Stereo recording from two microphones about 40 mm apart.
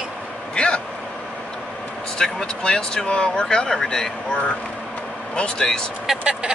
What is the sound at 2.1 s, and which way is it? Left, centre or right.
Speech, left.